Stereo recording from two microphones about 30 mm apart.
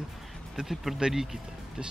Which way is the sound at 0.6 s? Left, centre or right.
Right.